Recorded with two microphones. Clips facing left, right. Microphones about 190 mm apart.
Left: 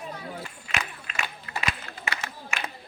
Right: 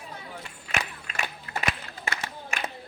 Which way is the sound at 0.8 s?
45° right (ahead or behind).